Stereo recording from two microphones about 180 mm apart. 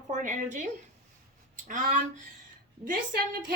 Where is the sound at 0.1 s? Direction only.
45° right (ahead or behind).